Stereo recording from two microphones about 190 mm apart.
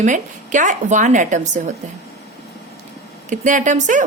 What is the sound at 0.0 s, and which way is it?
A woman's voice, 40° right (ahead or behind).